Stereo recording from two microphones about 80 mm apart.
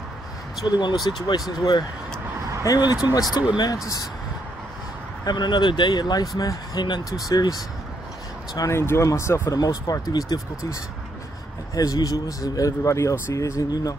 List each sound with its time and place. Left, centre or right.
0.7 s speech: left
5.2 s speech: left
8.5 s speech: left
9.6 s speech: left